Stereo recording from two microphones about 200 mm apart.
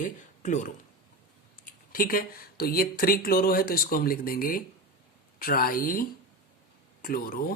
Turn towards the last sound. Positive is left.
turn(degrees=45)  # may be behind; listen again after turning